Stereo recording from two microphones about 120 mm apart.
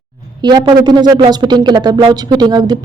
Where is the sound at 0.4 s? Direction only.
40° right (ahead or behind).